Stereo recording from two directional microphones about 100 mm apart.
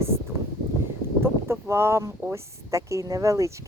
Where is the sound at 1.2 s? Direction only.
25° right (ahead or behind).